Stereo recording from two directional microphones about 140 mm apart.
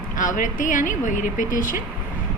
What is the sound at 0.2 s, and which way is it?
A woman's voice, 70° left (ahead or behind).